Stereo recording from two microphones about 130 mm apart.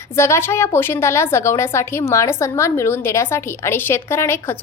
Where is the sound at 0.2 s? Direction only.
20° left (ahead or behind).